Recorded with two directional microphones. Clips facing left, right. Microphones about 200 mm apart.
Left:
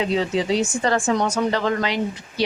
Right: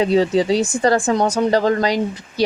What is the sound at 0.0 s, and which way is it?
A woman's voice, 35° right (ahead or behind).